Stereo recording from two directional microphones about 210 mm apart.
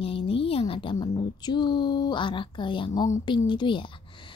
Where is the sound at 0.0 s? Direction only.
25° left (ahead or behind).